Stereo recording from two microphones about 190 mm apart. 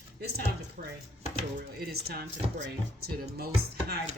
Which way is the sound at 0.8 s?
45° right (ahead or behind).